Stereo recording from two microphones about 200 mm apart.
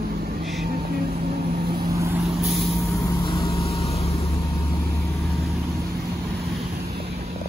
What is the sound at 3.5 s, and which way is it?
Vehicle, 30° left (ahead or behind).